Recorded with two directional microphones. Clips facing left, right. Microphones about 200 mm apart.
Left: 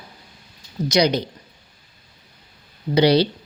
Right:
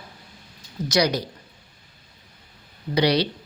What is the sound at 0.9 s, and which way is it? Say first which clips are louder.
Speech: left 3 dB; 20° left (ahead or behind).